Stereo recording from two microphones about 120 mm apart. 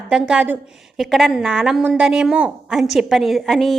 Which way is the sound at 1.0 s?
Centre (ahead or behind).